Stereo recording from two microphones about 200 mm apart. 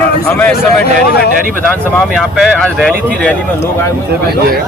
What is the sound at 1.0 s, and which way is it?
Speech, 50° left (ahead or behind).